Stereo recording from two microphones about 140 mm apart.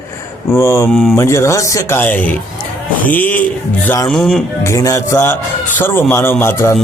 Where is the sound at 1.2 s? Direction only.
20° left (ahead or behind).